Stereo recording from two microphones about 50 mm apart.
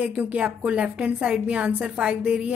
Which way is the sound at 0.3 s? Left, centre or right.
Right.